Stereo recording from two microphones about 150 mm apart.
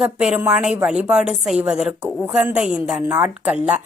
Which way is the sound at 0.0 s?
10° right (ahead or behind).